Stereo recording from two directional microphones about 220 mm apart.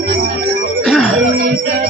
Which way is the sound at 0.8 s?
Centre (ahead or behind).